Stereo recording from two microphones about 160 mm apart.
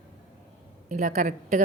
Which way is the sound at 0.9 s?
55° right (ahead or behind).